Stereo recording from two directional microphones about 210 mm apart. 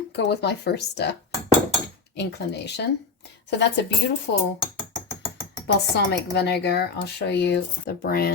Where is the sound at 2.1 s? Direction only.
55° left (ahead or behind).